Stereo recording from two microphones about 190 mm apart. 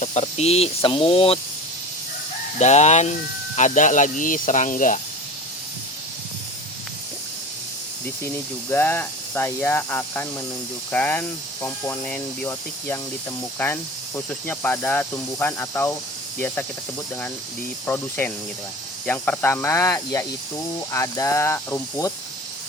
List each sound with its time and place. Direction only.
0.0 s speech: 35° left (ahead or behind)
2.6 s speech: 35° left (ahead or behind)
8.7 s speech: 10° left (ahead or behind)
14.3 s speech: 10° left (ahead or behind)
17.8 s speech: 10° left (ahead or behind)